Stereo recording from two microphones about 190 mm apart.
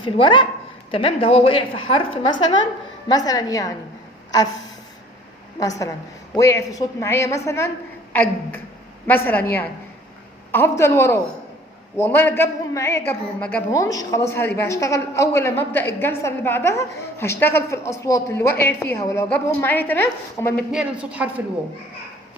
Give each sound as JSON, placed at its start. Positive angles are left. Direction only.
{"t": 0.0, "sound": "a woman's voice", "side_deg": 25}
{"t": 5.5, "sound": "a woman's voice", "side_deg": 20}
{"t": 20.7, "sound": "a woman's voice", "side_deg": -5}